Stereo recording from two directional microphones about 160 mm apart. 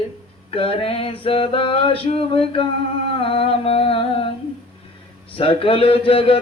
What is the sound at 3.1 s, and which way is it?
Humming, 35° left (ahead or behind).